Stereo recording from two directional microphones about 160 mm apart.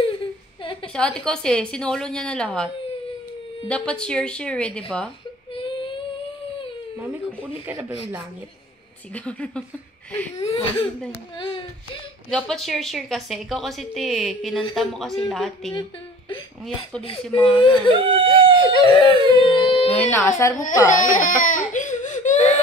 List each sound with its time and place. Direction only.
0.0 s a sound: 30° left (ahead or behind)
0.9 s a woman's voice: 5° left (ahead or behind)
7.0 s speech: 10° right (ahead or behind)
9.1 s speech: 10° left (ahead or behind)
11.3 s speech: 30° left (ahead or behind)
12.3 s a woman's voice: 5° left (ahead or behind)
17.6 s speech: 30° left (ahead or behind)
17.9 s whimper: 35° right (ahead or behind)
18.7 s a sound: 35° left (ahead or behind)
19.9 s speech: 10° left (ahead or behind)
20.9 s baby cry: 55° left (ahead or behind)